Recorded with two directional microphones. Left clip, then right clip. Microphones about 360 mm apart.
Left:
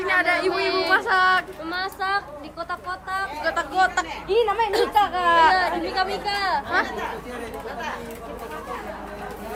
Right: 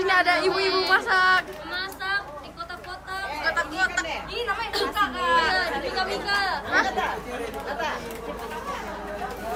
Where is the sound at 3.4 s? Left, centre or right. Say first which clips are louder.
Left 3 dB; centre.